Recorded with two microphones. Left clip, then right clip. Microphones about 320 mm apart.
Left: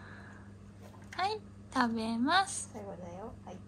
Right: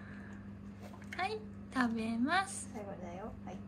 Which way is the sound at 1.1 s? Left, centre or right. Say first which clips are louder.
Left 4 dB; centre.